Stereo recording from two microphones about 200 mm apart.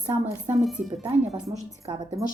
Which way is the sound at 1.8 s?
20° right (ahead or behind).